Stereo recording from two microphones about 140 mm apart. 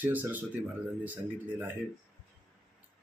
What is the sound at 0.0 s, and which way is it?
Speech, 10° right (ahead or behind).